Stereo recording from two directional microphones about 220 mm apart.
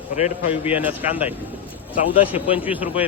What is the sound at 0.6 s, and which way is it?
Speech, 10° right (ahead or behind).